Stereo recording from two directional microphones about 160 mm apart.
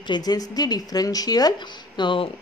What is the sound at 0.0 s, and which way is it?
A woman's voice, 25° left (ahead or behind).